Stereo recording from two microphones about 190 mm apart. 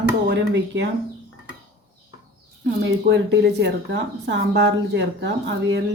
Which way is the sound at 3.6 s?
65° right (ahead or behind).